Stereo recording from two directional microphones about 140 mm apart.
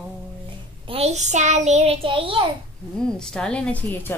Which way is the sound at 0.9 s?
50° right (ahead or behind).